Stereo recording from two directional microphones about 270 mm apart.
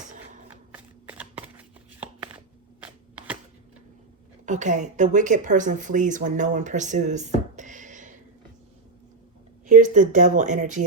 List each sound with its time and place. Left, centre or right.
0.7 s shuffling cards: centre
4.4 s speech: right
9.6 s speech: right